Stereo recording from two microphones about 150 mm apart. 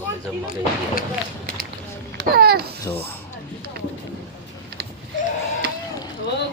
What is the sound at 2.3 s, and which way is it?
Babbling, 90° right.